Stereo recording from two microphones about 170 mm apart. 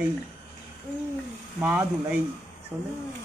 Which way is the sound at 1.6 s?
10° right (ahead or behind).